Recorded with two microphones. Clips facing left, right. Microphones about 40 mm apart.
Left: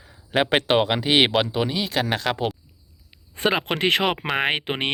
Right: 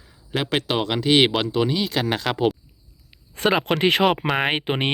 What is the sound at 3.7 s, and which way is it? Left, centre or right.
Speech, left.